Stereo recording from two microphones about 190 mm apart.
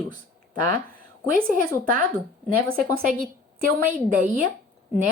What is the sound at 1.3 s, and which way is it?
Speech, 50° right (ahead or behind).